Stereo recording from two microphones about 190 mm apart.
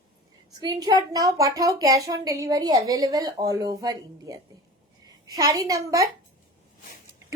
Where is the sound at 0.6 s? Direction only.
20° right (ahead or behind).